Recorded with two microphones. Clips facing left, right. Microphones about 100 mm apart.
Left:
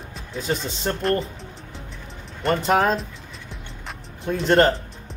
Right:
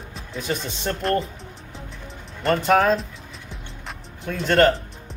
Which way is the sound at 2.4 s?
Centre (ahead or behind).